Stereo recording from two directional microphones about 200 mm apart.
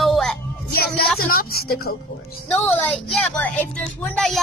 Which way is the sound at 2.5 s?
5° left (ahead or behind).